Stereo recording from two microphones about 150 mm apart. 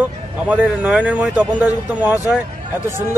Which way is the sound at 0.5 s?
10° right (ahead or behind).